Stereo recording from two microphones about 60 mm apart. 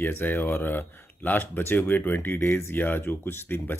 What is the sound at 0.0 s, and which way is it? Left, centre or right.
Speech, left.